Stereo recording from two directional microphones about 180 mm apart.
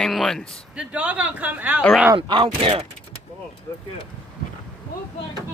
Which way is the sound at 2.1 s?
25° right (ahead or behind).